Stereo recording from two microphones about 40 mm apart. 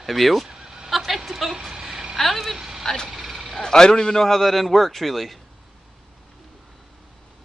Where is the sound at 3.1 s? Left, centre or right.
Centre.